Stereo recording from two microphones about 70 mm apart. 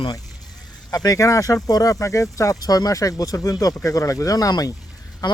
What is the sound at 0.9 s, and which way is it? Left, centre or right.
Speech, left.